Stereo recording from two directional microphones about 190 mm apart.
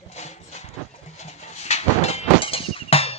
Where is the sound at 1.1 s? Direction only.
35° left (ahead or behind).